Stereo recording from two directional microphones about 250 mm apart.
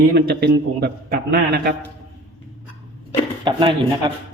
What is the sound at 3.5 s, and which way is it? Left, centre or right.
Speech, centre.